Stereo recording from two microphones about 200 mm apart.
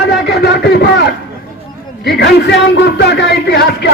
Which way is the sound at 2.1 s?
55° left (ahead or behind).